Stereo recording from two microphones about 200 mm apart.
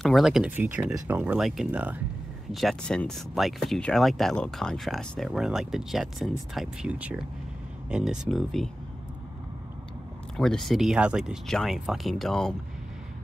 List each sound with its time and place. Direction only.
0.0 s speech: centre (ahead or behind)
10.3 s speech: centre (ahead or behind)